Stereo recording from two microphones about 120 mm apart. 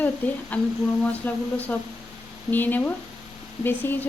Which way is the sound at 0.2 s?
10° left (ahead or behind).